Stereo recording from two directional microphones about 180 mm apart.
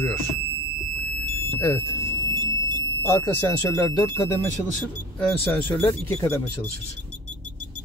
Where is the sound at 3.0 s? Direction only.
15° left (ahead or behind).